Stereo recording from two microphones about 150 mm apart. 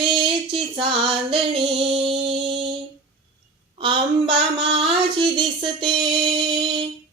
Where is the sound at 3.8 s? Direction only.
35° right (ahead or behind).